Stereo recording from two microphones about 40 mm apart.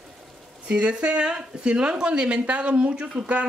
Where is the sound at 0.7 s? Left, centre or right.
Right.